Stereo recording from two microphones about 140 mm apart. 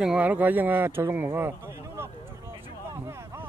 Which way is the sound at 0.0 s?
10° right (ahead or behind).